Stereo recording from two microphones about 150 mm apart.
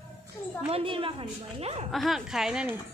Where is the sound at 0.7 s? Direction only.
35° right (ahead or behind).